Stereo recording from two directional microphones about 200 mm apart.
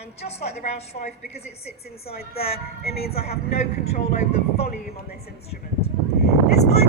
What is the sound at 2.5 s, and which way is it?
Speech, 50° left (ahead or behind).